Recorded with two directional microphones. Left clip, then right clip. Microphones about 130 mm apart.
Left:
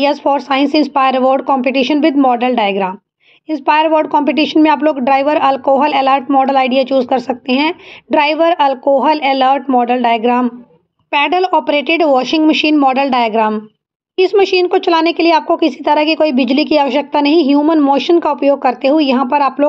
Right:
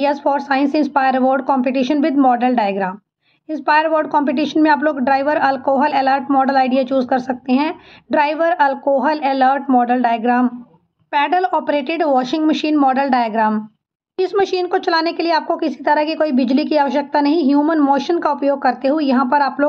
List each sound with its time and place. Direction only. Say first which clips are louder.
0.0 s a woman's voice: left 4 dB; 30° left (ahead or behind)